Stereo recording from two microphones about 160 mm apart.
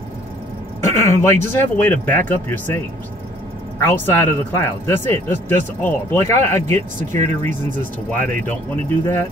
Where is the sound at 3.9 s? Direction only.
15° left (ahead or behind).